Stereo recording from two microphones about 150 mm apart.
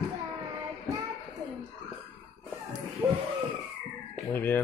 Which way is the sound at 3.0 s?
10° right (ahead or behind).